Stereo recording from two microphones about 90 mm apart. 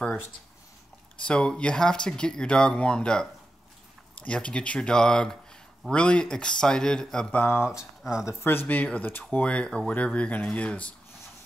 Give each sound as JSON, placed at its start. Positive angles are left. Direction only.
{"t": 1.2, "sound": "speech", "side_deg": 10}
{"t": 7.6, "sound": "speech", "side_deg": -5}
{"t": 8.3, "sound": "speech", "side_deg": 25}